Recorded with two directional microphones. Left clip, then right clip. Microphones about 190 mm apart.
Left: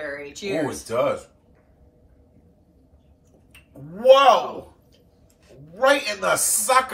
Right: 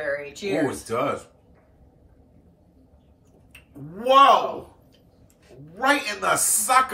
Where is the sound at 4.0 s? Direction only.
5° left (ahead or behind).